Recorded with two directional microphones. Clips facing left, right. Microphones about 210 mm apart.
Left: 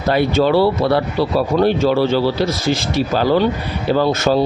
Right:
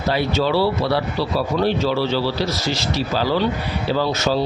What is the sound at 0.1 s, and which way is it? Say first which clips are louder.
Speech: left 5 dB; 55° left (ahead or behind).